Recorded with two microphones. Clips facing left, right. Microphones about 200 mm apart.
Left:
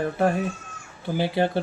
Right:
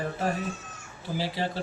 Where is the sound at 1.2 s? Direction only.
60° left (ahead or behind).